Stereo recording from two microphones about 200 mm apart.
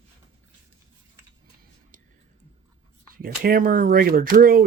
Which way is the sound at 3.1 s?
45° right (ahead or behind).